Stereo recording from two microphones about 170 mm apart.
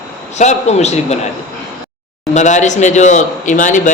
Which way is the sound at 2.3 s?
45° left (ahead or behind).